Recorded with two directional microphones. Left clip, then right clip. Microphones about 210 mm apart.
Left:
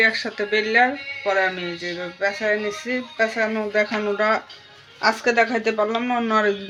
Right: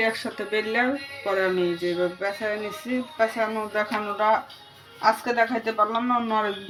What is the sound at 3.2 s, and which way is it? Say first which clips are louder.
Speech: left 2 dB; 40° left (ahead or behind).